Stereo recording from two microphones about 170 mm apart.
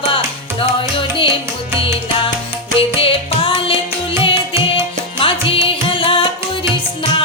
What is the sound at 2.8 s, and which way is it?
Music, 35° left (ahead or behind).